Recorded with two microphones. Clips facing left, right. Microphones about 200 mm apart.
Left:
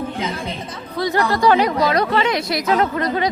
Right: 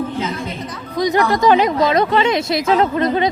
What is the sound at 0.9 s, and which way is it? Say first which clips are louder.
Speech: right 3 dB; 15° right (ahead or behind).